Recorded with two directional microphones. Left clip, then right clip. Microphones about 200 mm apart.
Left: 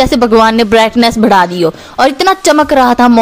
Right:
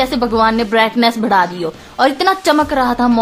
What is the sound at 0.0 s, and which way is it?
Speech, 35° left (ahead or behind).